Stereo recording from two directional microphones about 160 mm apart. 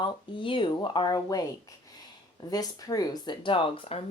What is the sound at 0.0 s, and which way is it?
Speech, 30° left (ahead or behind).